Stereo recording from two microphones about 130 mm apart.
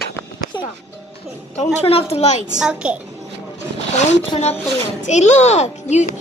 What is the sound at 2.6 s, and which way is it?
Speech, 10° right (ahead or behind).